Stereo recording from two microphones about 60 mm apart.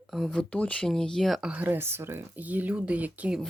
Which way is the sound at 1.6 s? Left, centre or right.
Right.